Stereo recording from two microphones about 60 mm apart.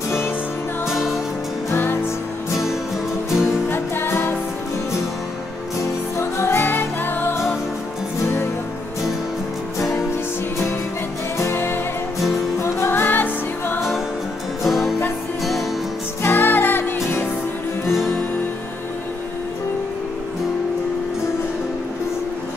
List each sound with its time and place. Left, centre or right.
3.7 s music: left
6.1 s music: left
11.3 s music: left
12.6 s music: left
12.9 s music: left
14.6 s music: centre
16.2 s music: left